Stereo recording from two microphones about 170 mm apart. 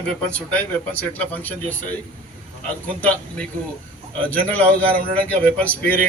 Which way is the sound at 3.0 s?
10° left (ahead or behind).